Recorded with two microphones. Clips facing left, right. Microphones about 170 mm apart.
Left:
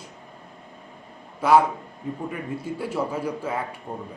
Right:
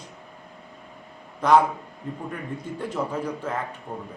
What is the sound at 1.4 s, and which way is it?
A man's voice, 5° left (ahead or behind).